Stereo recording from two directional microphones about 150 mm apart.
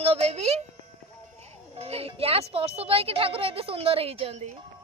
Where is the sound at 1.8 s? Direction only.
40° right (ahead or behind).